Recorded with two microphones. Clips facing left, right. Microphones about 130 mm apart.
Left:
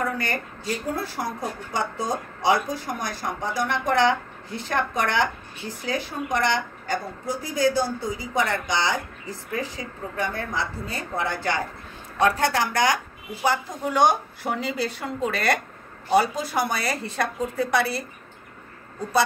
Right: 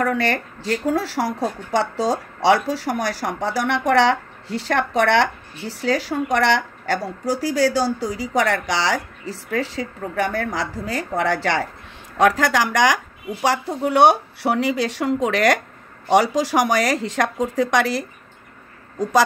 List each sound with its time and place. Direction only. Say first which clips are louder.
0.0 s a woman's voice: right 6 dB; 90° right